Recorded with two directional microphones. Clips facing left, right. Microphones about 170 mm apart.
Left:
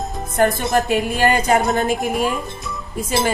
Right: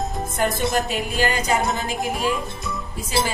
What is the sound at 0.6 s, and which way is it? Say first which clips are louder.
Music: left 4 dB; 60° left (ahead or behind).